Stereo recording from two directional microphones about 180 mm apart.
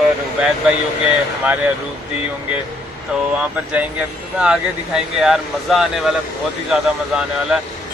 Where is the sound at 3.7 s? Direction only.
5° right (ahead or behind).